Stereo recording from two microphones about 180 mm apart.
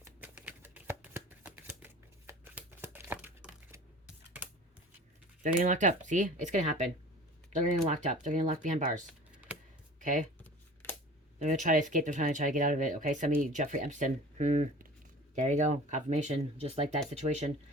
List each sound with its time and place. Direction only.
0.0 s shuffling cards: 10° right (ahead or behind)
5.4 s speech: 45° right (ahead or behind)
11.3 s speech: 40° right (ahead or behind)